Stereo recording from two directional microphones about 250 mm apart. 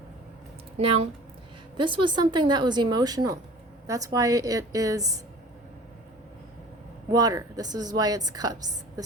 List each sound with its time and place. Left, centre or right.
1.7 s a woman's voice: centre
7.1 s a woman's voice: centre
9.0 s a sound: centre